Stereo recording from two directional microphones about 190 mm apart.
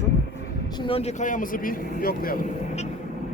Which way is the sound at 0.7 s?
25° left (ahead or behind).